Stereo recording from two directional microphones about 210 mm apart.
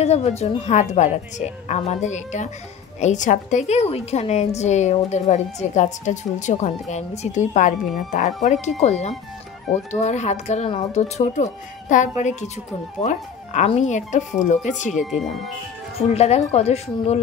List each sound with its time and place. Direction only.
0.0 s a woman's voice: 30° left (ahead or behind)
15.0 s speech: centre (ahead or behind)
16.1 s a woman's voice: 30° left (ahead or behind)